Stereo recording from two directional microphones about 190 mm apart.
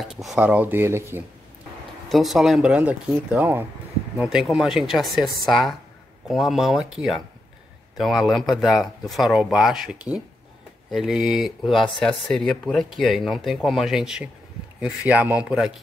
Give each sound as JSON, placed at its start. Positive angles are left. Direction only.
{"t": 0.0, "sound": "speech", "side_deg": 0}
{"t": 2.0, "sound": "speech", "side_deg": 0}